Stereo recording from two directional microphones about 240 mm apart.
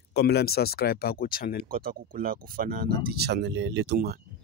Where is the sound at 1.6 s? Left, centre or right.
Right.